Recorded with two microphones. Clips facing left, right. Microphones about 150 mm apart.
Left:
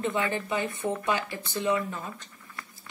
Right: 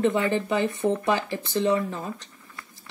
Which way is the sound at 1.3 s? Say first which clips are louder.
Right 5 dB; 35° right (ahead or behind).